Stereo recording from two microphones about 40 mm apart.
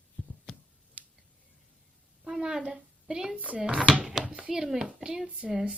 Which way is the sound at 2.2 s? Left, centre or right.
Centre.